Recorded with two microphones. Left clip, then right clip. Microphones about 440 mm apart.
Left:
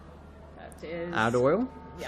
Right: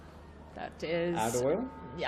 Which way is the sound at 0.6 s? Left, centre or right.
Right.